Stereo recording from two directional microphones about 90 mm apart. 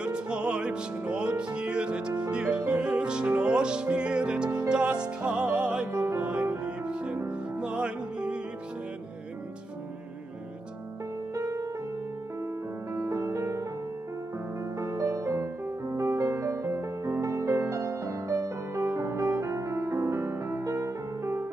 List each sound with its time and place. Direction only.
0.0 s music: 10° right (ahead or behind)
11.3 s music: 35° right (ahead or behind)
12.9 s music: 35° right (ahead or behind)
14.8 s music: 35° right (ahead or behind)